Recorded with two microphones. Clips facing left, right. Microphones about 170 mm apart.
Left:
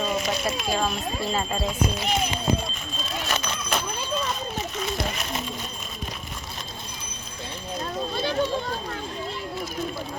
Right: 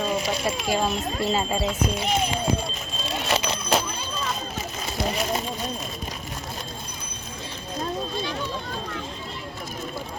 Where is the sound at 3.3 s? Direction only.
30° right (ahead or behind).